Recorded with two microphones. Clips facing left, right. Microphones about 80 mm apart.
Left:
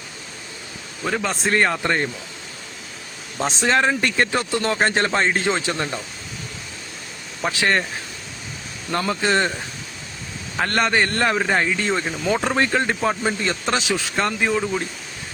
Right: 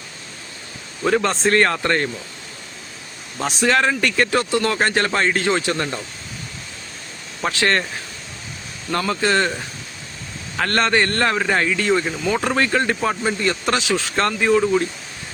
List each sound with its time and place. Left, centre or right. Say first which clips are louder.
1.0 s a man's voice: right 5 dB; centre
3.4 s speech: right 1 dB; left
7.5 s a man's voice: right 1 dB; centre
8.9 s speech: right 1 dB; centre
10.6 s a man's voice: right 1 dB; centre
12.3 s a man's voice: even; centre